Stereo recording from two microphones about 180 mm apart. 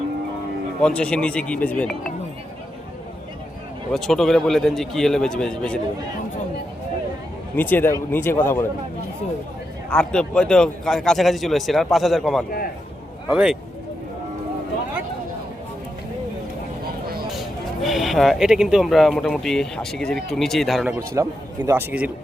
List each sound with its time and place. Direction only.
0.8 s speech: 5° left (ahead or behind)
3.9 s speech: centre (ahead or behind)
7.5 s speech: 10° left (ahead or behind)
9.9 s speech: 5° left (ahead or behind)
12.5 s a man's voice: 55° left (ahead or behind)
13.3 s speech: 5° right (ahead or behind)
17.8 s speech: centre (ahead or behind)
21.1 s a man's voice: 15° right (ahead or behind)